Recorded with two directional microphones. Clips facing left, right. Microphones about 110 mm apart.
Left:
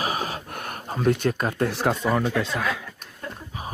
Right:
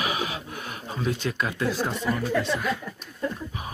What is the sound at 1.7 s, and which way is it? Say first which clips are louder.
Speech: left 2 dB; 70° left (ahead or behind).